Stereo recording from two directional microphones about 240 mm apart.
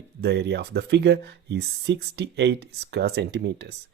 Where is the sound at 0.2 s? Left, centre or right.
Right.